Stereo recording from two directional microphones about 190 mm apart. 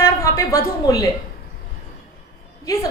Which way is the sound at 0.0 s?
15° left (ahead or behind).